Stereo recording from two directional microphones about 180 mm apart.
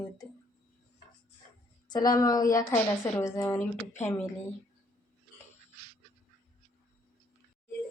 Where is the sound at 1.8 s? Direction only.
20° left (ahead or behind).